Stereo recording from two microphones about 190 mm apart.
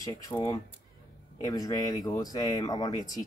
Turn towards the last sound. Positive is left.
turn(degrees=20)  # may be behind; listen again after turning